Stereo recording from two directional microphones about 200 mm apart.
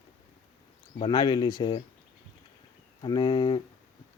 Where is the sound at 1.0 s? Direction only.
20° left (ahead or behind).